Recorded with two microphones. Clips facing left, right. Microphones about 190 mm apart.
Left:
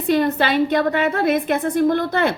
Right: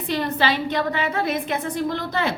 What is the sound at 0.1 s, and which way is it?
A woman's voice, 50° left (ahead or behind).